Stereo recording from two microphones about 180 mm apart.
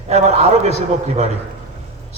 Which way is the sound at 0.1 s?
35° right (ahead or behind).